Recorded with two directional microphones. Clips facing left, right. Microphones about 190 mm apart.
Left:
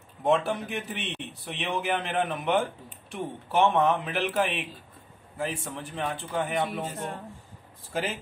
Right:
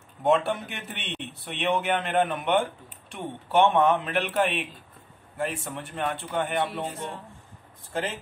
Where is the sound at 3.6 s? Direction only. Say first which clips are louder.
Right 1 dB; centre (ahead or behind).